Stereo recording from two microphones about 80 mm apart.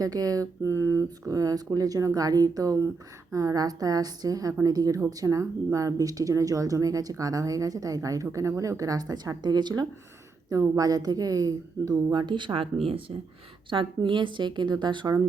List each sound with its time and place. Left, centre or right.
0.0 s speech: right
10.5 s speech: right
13.7 s a woman's voice: right